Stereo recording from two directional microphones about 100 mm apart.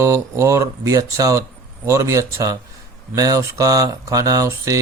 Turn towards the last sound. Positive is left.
turn(degrees=-35)  # may be behind; listen again after turning